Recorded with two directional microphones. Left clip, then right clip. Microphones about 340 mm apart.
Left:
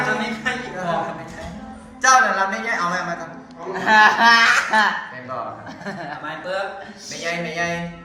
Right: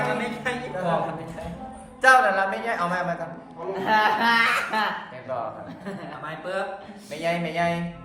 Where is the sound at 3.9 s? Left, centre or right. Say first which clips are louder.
Left 8 dB; left.